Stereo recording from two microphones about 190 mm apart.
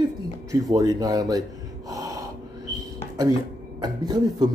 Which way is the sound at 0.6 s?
20° right (ahead or behind).